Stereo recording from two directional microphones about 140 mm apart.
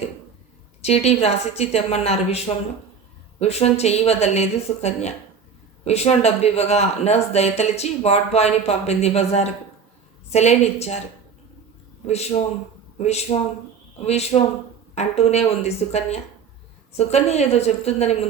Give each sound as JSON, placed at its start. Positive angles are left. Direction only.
{"t": 0.8, "sound": "speech", "side_deg": 50}
{"t": 3.4, "sound": "speech", "side_deg": 50}
{"t": 12.0, "sound": "speech", "side_deg": 50}